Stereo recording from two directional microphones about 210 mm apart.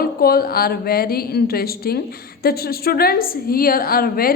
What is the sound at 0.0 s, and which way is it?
A woman's voice, 45° left (ahead or behind).